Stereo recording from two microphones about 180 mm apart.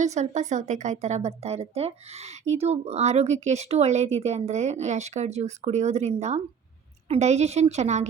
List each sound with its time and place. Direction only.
0.0 s speech: 40° right (ahead or behind)